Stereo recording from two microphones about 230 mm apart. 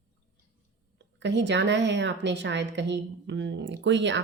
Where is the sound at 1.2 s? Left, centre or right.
Right.